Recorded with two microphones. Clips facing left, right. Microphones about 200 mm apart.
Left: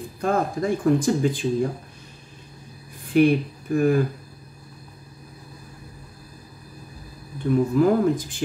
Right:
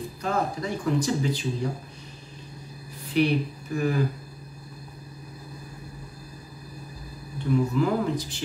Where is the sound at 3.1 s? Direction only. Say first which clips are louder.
Left 6 dB; 50° left (ahead or behind).